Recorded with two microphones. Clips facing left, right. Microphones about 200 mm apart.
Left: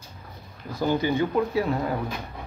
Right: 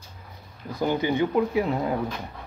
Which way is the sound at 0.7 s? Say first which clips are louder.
Even; 15° right (ahead or behind).